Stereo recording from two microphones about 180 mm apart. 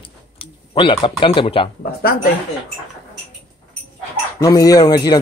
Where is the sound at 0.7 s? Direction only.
30° left (ahead or behind).